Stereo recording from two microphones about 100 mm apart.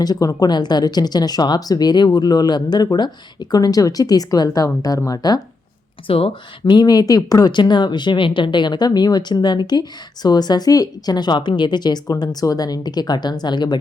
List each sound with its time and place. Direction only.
0.0 s a woman's voice: 40° left (ahead or behind)
6.1 s speech: 70° left (ahead or behind)
6.7 s speech: 45° left (ahead or behind)